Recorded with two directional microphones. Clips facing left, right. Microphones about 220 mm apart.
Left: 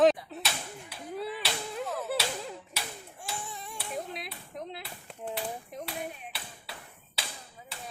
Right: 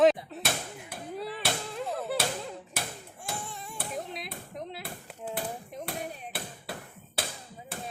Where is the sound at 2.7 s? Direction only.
50° right (ahead or behind).